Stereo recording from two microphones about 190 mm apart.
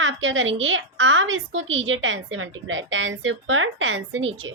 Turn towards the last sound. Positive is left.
turn(degrees=-85)